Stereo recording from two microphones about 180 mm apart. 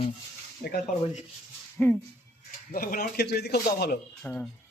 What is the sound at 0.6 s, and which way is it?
Speech, 60° left (ahead or behind).